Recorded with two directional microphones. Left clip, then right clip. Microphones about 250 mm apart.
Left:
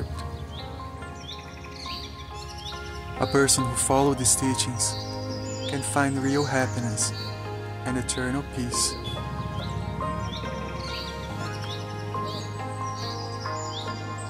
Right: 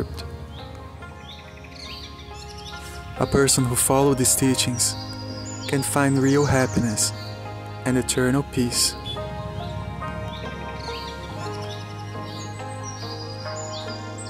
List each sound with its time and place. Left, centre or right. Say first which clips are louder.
3.2 s speech: right 2 dB; right